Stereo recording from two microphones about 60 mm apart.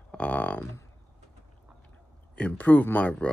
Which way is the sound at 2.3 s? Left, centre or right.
Left.